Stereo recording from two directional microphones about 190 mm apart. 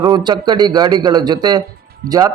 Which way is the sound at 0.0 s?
20° right (ahead or behind).